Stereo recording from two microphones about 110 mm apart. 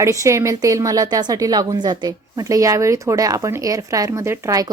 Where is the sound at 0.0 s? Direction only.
25° right (ahead or behind).